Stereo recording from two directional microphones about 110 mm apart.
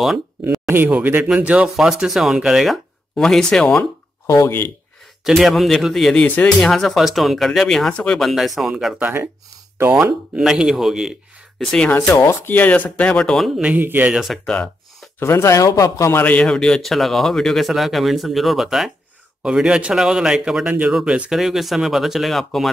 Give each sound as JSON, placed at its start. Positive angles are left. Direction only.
{"t": 0.7, "sound": "a man's voice", "side_deg": -20}
{"t": 4.3, "sound": "speech", "side_deg": 25}
{"t": 5.2, "sound": "a man's voice", "side_deg": 0}
{"t": 6.2, "sound": "speech", "side_deg": 15}
{"t": 6.6, "sound": "a man's voice", "side_deg": 5}
{"t": 9.0, "sound": "speech", "side_deg": -20}
{"t": 12.1, "sound": "speech", "side_deg": 25}
{"t": 13.6, "sound": "speech", "side_deg": -15}
{"t": 14.1, "sound": "a man's voice", "side_deg": 0}
{"t": 15.1, "sound": "a man's voice", "side_deg": 20}